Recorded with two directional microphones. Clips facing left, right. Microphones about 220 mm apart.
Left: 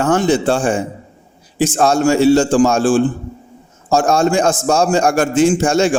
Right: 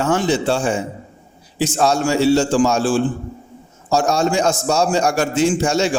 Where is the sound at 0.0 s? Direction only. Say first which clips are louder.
Left 4 dB; 50° left (ahead or behind).